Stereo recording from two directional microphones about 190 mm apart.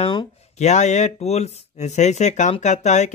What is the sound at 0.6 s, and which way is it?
Speech, 35° left (ahead or behind).